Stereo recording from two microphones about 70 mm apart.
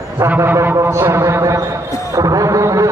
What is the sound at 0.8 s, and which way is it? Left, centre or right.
Basketball bounce, right.